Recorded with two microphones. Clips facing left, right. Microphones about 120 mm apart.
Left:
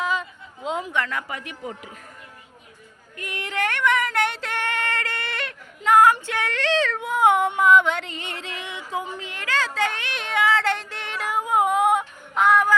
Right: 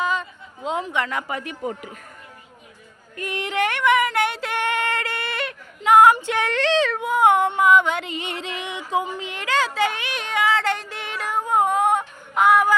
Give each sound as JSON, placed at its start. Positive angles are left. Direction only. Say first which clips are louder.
{"t": 0.0, "sound": "a sound", "louder": "right 2 dB", "side_deg": 0}
{"t": 0.9, "sound": "speech", "louder": "even", "side_deg": -15}
{"t": 1.3, "sound": "speech", "louder": "right 5 dB", "side_deg": -35}
{"t": 3.2, "sound": "speech", "louder": "right 5 dB", "side_deg": -30}
{"t": 3.4, "sound": "female singing", "louder": "right 3 dB", "side_deg": -15}
{"t": 5.9, "sound": "a sound", "louder": "right 2 dB", "side_deg": -25}
{"t": 6.2, "sound": "speech", "louder": "right 4 dB", "side_deg": -25}
{"t": 6.7, "sound": "speech", "louder": "right 1 dB", "side_deg": -15}
{"t": 7.0, "sound": "a sound", "louder": "right 1 dB", "side_deg": 0}
{"t": 7.6, "sound": "music", "louder": "even", "side_deg": 0}
{"t": 9.1, "sound": "a sound", "louder": "right 4 dB", "side_deg": -20}
{"t": 12.3, "sound": "music", "louder": "right 2 dB", "side_deg": -10}